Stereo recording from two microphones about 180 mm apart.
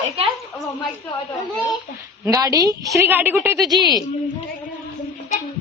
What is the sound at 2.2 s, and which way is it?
A woman's voice, 20° right (ahead or behind).